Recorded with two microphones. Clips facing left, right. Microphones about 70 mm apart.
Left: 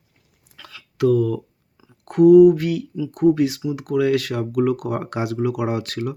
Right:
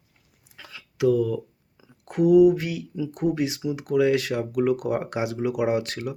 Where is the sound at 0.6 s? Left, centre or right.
Centre.